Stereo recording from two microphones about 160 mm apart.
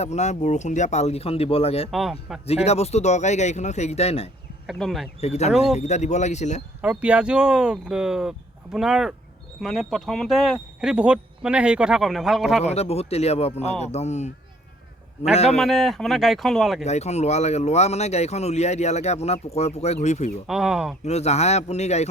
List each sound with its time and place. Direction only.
0.0 s speech: 45° left (ahead or behind)
1.9 s speech: centre (ahead or behind)
2.6 s speech: 40° left (ahead or behind)
4.6 s speech: centre (ahead or behind)
5.2 s speech: 45° left (ahead or behind)
6.8 s speech: 10° right (ahead or behind)
12.6 s speech: 40° left (ahead or behind)
15.5 s speech: centre (ahead or behind)
16.8 s speech: 45° left (ahead or behind)
20.5 s speech: 5° right (ahead or behind)
21.0 s speech: 45° left (ahead or behind)